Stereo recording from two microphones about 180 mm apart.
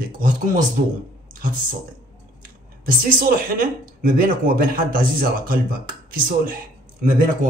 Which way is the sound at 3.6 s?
55° right (ahead or behind).